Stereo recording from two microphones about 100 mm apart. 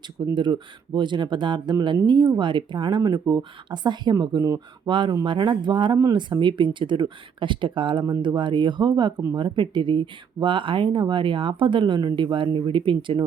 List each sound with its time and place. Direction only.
0.3 s speech: 50° right (ahead or behind)
4.9 s speech: 55° right (ahead or behind)